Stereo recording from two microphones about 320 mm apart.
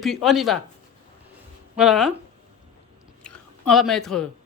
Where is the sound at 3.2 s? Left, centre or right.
Centre.